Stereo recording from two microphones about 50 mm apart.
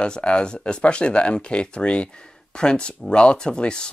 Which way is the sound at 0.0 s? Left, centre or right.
Centre.